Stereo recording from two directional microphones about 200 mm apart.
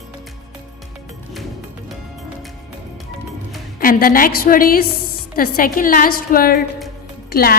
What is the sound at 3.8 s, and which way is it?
A woman's voice, 45° left (ahead or behind).